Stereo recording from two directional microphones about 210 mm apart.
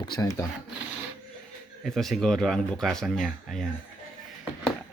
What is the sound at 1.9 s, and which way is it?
Speech, centre (ahead or behind).